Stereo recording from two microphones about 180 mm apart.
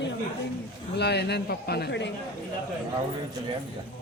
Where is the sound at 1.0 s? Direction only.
65° left (ahead or behind).